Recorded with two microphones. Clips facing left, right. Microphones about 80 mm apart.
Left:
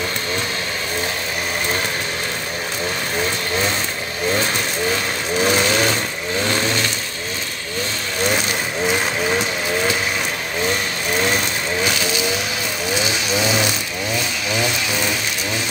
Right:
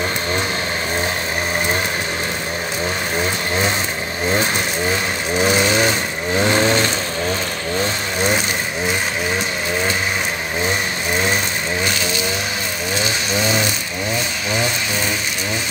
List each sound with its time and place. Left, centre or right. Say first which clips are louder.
5.4 s vehicle: right 1 dB; centre
6.4 s vehicle: right 5 dB; right
12.9 s vehicle: even; centre